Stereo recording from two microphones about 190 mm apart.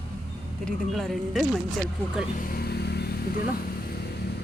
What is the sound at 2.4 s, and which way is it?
Vehicle, 50° left (ahead or behind).